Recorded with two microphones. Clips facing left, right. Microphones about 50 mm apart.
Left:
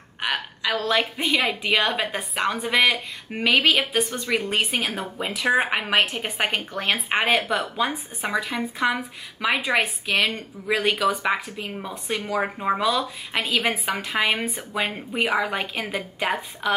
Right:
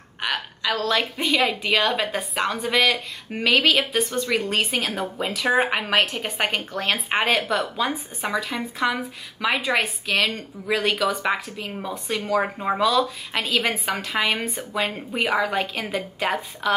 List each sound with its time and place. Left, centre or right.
0.2 s a woman's voice: centre
12.3 s a woman's voice: centre
15.4 s a woman's voice: centre